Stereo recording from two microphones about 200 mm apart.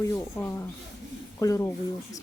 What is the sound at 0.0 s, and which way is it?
Speech, 15° left (ahead or behind).